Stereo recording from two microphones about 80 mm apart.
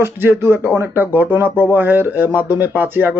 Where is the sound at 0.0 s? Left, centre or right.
Right.